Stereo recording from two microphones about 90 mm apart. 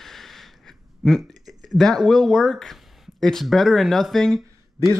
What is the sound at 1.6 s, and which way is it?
Speech, 5° left (ahead or behind).